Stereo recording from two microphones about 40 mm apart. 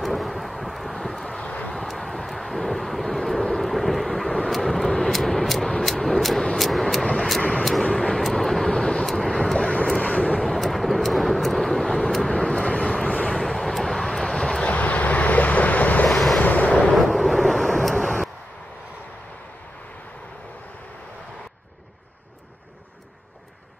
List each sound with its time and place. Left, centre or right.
0.0 s vehicle: centre
1.4 s vehicle: left
1.7 s vehicle: centre
8.1 s vehicle: centre
10.0 s vehicle: left
10.4 s vehicle: centre
12.3 s vehicle: centre
13.4 s vehicle: centre
14.6 s vehicle: left
16.1 s waves: centre
16.3 s waves: left
16.9 s wind noise: centre